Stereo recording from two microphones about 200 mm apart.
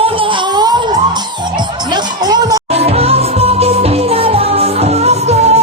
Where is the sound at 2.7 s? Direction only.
30° right (ahead or behind).